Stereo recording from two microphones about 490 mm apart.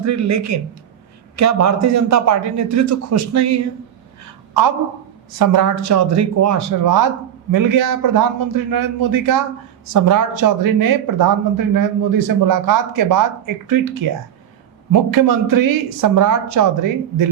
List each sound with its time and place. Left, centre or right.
0.0 s speech: right
5.4 s speech: right
15.1 s speech: right